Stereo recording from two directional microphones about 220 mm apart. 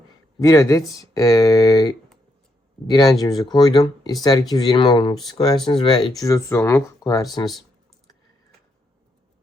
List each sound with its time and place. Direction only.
0.3 s speech: 15° left (ahead or behind)